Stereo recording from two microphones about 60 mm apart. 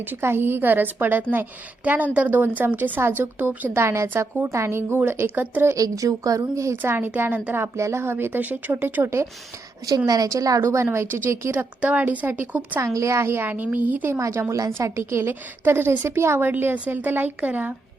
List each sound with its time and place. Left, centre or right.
0.0 s a woman's voice: right
3.8 s a woman's voice: right
5.7 s a woman's voice: right
7.3 s a woman's voice: right
7.8 s speech: right
10.1 s a woman's voice: right
11.8 s a woman's voice: right
12.8 s a woman's voice: right
13.4 s a woman's voice: right
14.2 s a woman's voice: right
15.3 s speech: right
16.5 s speech: right
16.7 s a woman's voice: right